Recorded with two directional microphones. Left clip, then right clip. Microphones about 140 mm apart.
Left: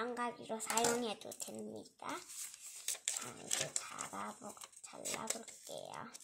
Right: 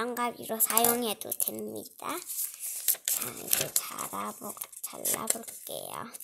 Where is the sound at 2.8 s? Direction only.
25° right (ahead or behind).